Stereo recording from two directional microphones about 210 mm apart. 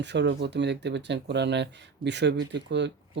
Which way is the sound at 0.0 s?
55° right (ahead or behind).